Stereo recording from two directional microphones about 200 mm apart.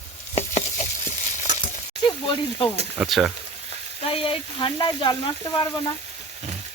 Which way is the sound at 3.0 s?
Centre (ahead or behind).